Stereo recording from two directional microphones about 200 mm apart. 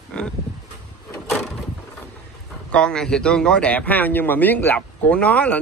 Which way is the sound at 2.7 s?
5° left (ahead or behind).